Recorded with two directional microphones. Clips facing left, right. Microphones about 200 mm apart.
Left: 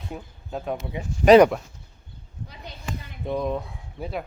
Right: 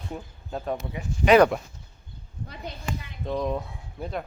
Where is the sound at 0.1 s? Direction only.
5° left (ahead or behind).